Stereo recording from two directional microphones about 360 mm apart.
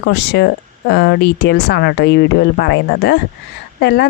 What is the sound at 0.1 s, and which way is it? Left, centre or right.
Speech, left.